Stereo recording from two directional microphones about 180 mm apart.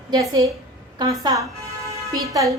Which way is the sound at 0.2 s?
20° right (ahead or behind).